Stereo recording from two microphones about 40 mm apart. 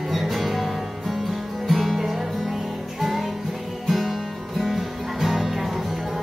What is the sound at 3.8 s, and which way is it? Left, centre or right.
Music, centre.